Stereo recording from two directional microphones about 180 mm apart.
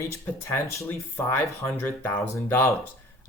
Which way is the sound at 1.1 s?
10° left (ahead or behind).